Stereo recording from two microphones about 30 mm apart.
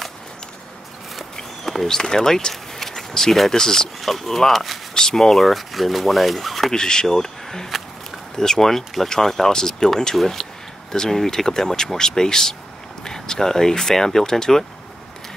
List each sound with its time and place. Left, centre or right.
1.6 s a sound: centre
1.9 s speech: centre
4.0 s speech: centre
4.9 s speech: centre
5.4 s speech: centre
6.7 s speech: left